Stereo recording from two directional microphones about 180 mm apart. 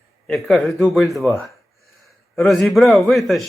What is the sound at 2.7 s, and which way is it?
Speech, centre (ahead or behind).